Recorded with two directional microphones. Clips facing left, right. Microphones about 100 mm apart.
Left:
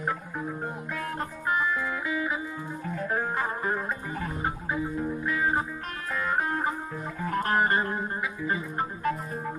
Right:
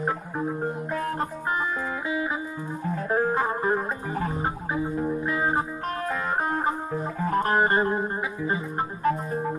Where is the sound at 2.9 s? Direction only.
30° right (ahead or behind).